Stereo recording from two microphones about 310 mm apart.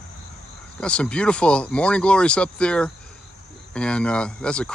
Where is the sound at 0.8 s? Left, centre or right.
Centre.